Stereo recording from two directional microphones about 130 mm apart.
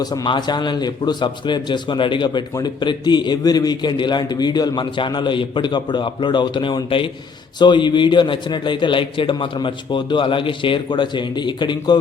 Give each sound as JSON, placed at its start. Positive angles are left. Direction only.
{"t": 0.0, "sound": "a man's voice", "side_deg": 30}